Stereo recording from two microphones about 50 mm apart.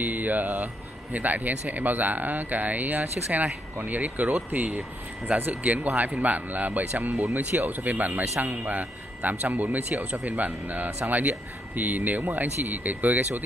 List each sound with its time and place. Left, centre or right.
0.0 s a man's voice: right